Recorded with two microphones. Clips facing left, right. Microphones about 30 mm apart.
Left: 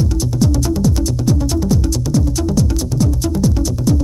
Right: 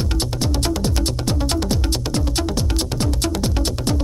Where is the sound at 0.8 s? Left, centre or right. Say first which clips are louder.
Left 5 dB; right.